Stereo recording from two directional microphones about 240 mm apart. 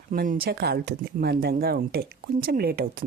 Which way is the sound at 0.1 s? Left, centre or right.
Right.